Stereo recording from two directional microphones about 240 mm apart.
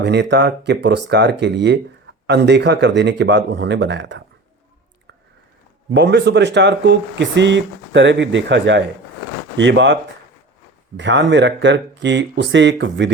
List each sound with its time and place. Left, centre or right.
0.0 s speech: right
5.9 s speech: right